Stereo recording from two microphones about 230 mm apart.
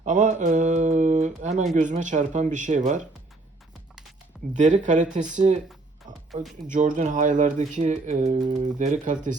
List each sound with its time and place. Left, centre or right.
0.0 s a sound: right
1.7 s speech: right
4.5 s speech: right
6.7 s speech: right